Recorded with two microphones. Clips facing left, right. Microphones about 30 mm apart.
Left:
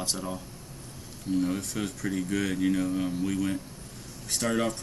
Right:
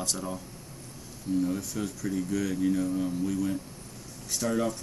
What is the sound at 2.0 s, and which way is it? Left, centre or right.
Speech, left.